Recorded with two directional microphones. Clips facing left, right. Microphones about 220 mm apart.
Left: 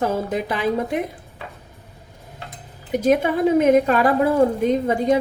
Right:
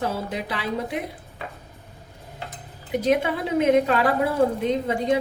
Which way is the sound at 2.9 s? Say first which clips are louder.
Left 4 dB; 45° left (ahead or behind).